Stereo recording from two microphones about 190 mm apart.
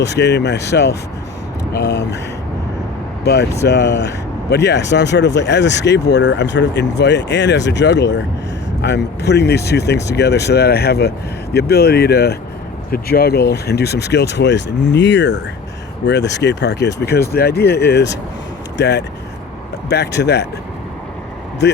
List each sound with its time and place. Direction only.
0.0 s speech: 65° left (ahead or behind)
3.7 s speech: 65° left (ahead or behind)